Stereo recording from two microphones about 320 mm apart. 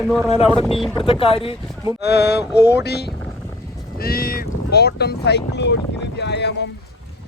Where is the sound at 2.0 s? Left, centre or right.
Left.